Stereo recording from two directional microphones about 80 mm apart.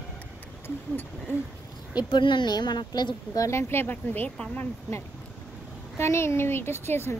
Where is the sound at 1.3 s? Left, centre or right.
Left.